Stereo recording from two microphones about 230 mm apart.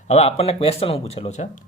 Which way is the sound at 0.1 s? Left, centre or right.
Left.